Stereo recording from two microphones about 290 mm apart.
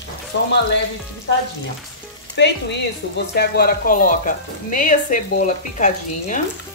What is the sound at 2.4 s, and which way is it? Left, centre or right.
Speech, left.